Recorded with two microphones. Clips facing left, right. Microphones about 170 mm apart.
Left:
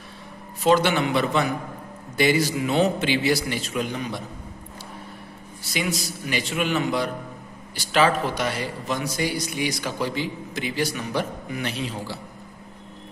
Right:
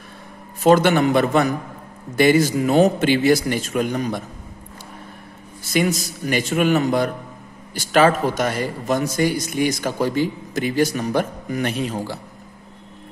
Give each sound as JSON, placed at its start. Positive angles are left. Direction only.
{"t": 0.7, "sound": "speech", "side_deg": -50}
{"t": 5.6, "sound": "speech", "side_deg": -50}